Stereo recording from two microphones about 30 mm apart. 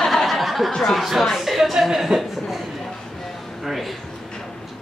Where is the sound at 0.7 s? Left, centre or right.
Centre.